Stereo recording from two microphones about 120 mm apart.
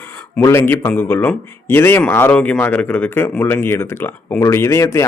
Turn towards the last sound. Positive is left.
turn(degrees=25)  # may be behind; listen again after turning